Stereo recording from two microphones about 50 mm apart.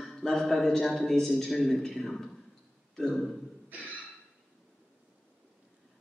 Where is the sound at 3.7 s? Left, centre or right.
Right.